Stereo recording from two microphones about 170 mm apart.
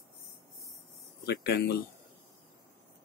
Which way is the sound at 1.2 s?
70° left (ahead or behind).